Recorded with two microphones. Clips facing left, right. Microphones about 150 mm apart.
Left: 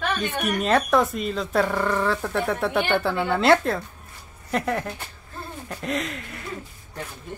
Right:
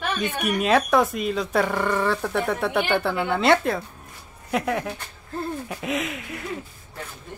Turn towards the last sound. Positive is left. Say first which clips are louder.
# right 3 dB
turn(degrees=-5)  # may be behind; listen again after turning